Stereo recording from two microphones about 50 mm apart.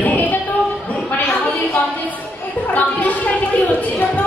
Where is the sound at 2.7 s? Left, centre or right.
Left.